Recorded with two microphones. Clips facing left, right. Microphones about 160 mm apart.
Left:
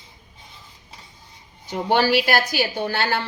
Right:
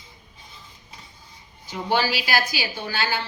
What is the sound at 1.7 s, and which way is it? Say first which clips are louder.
A woman's voice: left 5 dB; 55° left (ahead or behind).